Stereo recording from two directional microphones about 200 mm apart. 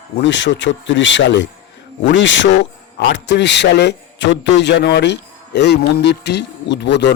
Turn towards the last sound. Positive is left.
turn(degrees=60)  # may be behind; listen again after turning